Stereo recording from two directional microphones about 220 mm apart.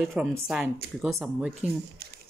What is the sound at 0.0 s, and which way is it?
Speech, centre (ahead or behind).